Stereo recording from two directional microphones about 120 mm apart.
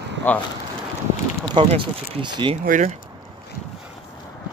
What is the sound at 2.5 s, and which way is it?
Speech, 75° right (ahead or behind).